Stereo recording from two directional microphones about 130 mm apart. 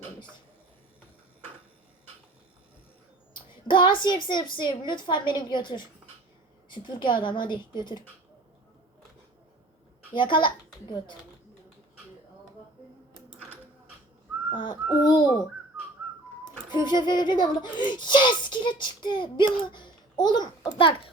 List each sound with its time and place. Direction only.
3.3 s a woman's voice: 35° left (ahead or behind)
10.1 s speech: 40° left (ahead or behind)
14.5 s speech: 35° left (ahead or behind)
16.6 s a child's voice: 35° left (ahead or behind)